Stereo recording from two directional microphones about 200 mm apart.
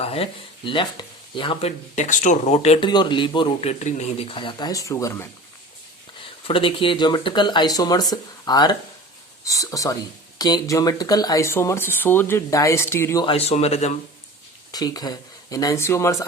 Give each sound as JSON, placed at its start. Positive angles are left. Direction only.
{"t": 0.0, "sound": "speech", "side_deg": 30}
{"t": 6.5, "sound": "speech", "side_deg": 25}
{"t": 13.2, "sound": "speech", "side_deg": 30}
{"t": 14.7, "sound": "speech", "side_deg": 20}